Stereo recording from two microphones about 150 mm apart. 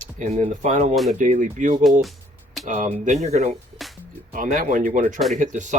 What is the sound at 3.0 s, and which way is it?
Speech, 50° right (ahead or behind).